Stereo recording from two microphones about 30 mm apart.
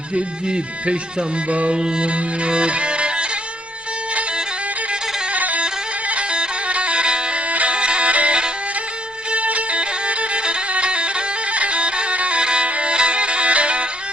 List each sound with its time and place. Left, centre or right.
0.1 s speech: right
1.5 s music: right
1.7 s music: right
5.3 s music: right
6.7 s music: right
7.5 s music: right
7.8 s music: right
8.1 s music: right
12.4 s music: right
12.6 s music: right
12.9 s music: right